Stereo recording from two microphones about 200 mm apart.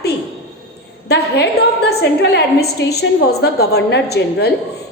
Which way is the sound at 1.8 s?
60° left (ahead or behind).